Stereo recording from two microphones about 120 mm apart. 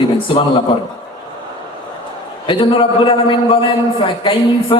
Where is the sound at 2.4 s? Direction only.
45° left (ahead or behind).